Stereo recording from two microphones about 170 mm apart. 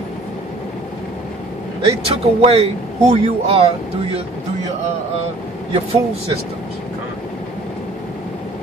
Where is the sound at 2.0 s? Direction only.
35° right (ahead or behind).